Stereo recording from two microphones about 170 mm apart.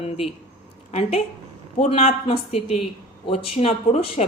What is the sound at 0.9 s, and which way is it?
Speech, 40° left (ahead or behind).